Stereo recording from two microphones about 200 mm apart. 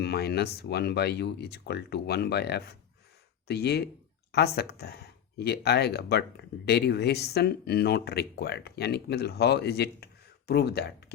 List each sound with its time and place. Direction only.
0.0 s speech: 55° left (ahead or behind)